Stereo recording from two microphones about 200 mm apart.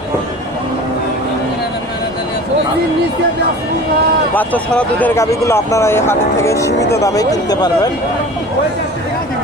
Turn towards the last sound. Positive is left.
turn(degrees=20)  # may be behind; listen again after turning